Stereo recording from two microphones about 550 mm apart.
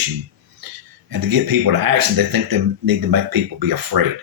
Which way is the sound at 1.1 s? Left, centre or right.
Right.